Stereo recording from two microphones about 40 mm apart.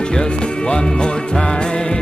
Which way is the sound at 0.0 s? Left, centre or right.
Left.